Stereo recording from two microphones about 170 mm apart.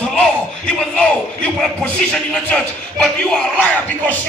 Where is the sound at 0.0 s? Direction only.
5° left (ahead or behind).